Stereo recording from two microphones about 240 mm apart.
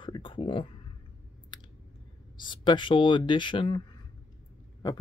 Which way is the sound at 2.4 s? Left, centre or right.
Centre.